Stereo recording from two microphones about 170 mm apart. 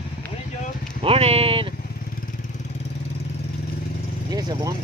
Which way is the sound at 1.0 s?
35° right (ahead or behind).